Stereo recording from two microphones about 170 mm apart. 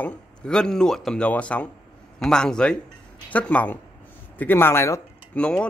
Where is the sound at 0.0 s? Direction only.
5° left (ahead or behind).